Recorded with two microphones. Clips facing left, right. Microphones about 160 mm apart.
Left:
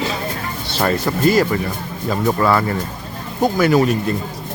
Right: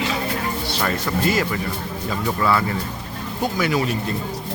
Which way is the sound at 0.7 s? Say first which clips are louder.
Left 7 dB; 40° left (ahead or behind).